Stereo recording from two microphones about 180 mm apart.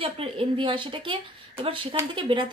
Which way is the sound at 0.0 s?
30° right (ahead or behind).